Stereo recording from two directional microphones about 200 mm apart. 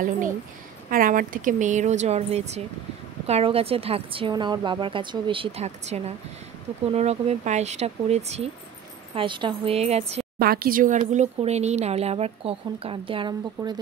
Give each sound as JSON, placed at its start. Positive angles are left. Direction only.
{"t": 0.8, "sound": "a woman's voice", "side_deg": -45}
{"t": 10.4, "sound": "speech", "side_deg": -50}